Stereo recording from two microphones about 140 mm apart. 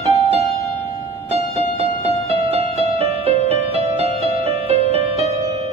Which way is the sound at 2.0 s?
45° right (ahead or behind).